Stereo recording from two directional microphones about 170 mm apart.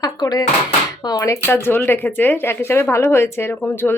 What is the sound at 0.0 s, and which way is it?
Speech, 20° left (ahead or behind).